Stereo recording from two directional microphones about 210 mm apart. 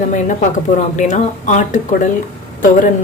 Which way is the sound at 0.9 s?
35° left (ahead or behind).